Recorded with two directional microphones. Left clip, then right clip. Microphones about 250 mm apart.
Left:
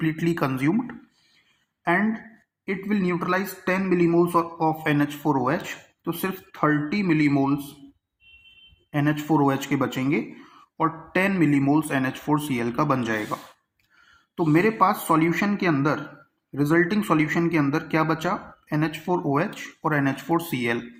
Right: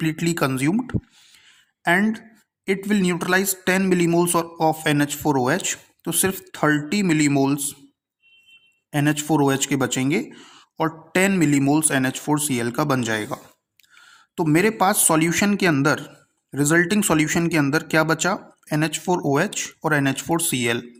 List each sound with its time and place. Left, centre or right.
0.0 s a man's voice: right
8.9 s a man's voice: right